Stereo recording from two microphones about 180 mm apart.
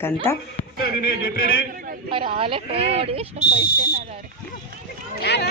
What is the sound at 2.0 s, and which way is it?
A woman's voice, 30° right (ahead or behind).